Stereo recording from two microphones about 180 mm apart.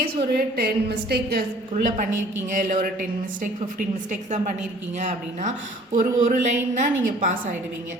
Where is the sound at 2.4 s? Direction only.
45° right (ahead or behind).